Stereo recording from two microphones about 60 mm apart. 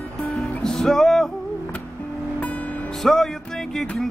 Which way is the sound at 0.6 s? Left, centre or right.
Centre.